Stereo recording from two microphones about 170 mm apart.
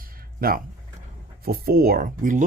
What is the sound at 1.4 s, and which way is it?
Speech, 60° right (ahead or behind).